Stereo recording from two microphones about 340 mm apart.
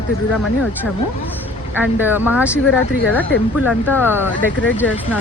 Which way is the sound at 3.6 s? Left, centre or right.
Centre.